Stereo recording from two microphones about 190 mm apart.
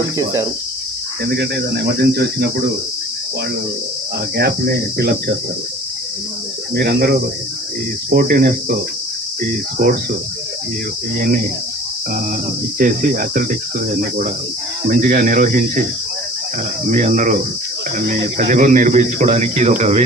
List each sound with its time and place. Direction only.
4.4 s speech: 55° right (ahead or behind)
6.7 s speech: 55° right (ahead or behind)
9.7 s speech: 45° right (ahead or behind)
12.8 s speech: 45° right (ahead or behind)
14.8 s speech: 45° right (ahead or behind)
16.8 s speech: 40° right (ahead or behind)